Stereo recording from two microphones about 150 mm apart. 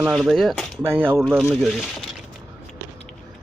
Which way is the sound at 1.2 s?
Centre (ahead or behind).